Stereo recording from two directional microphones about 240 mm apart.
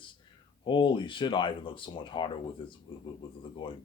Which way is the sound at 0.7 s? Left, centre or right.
Centre.